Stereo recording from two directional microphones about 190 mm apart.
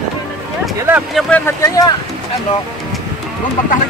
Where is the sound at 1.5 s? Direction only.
15° left (ahead or behind).